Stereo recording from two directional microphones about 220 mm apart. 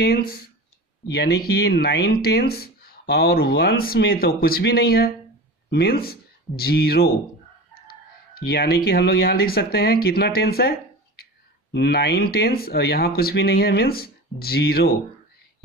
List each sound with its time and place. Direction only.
0.0 s speech: 45° left (ahead or behind)